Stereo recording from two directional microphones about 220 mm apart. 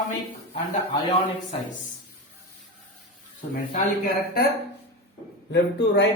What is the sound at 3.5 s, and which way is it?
Speech, 40° left (ahead or behind).